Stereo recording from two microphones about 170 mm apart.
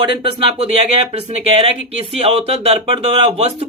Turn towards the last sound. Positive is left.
turn(degrees=-35)  # may be behind; listen again after turning